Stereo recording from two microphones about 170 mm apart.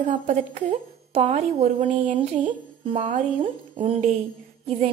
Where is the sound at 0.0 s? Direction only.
45° right (ahead or behind).